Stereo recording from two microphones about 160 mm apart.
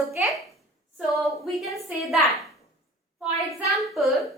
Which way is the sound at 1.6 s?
Centre (ahead or behind).